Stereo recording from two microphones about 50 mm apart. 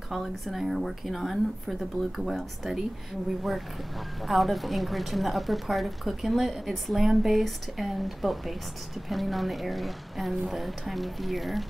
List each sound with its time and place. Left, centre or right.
0.1 s a woman's voice: centre
4.3 s a woman's voice: centre